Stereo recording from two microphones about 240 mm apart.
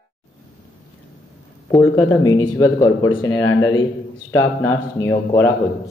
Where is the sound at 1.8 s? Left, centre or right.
Centre.